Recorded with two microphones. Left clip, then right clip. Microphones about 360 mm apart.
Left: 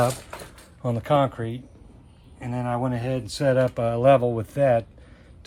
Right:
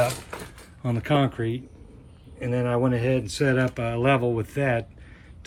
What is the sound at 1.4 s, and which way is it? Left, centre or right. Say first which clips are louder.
Speech: right 4 dB; left.